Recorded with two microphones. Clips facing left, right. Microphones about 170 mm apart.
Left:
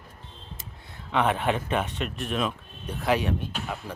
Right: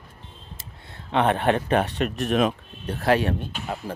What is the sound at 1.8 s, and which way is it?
Speech, 35° right (ahead or behind).